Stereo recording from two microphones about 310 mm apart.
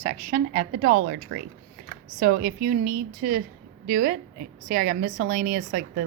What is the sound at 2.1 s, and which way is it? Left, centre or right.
A woman's voice, right.